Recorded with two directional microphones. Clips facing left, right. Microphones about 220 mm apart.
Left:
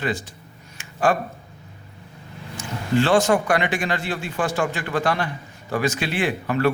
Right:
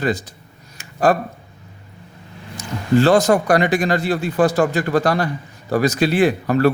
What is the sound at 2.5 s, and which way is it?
Speech, 40° right (ahead or behind).